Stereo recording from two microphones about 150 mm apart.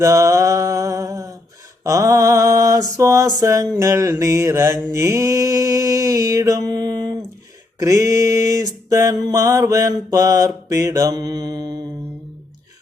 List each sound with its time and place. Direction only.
0.0 s mantra: 20° right (ahead or behind)